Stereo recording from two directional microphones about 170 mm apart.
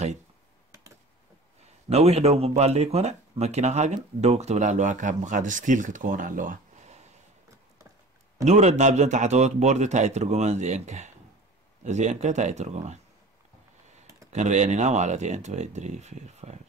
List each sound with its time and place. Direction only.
1.9 s speech: 40° right (ahead or behind)
8.5 s a man's voice: 40° right (ahead or behind)
14.3 s a man's voice: 45° right (ahead or behind)